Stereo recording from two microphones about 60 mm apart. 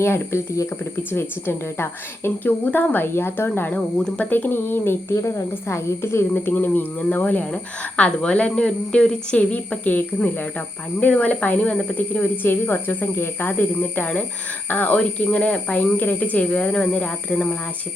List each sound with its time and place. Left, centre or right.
0.0 s a woman's voice: left
1.1 s a woman's voice: left
5.0 s a woman's voice: left
6.4 s a woman's voice: left
7.5 s a woman's voice: centre